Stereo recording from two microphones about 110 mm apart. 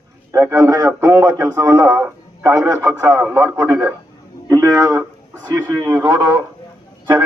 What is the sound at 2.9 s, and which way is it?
Radio, 35° right (ahead or behind).